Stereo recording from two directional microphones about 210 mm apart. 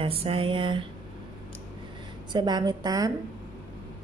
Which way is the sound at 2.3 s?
20° right (ahead or behind).